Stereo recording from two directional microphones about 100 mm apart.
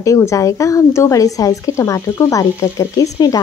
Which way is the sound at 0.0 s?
30° left (ahead or behind).